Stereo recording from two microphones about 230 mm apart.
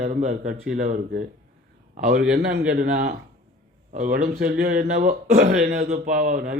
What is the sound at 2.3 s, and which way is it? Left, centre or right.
A man's voice, right.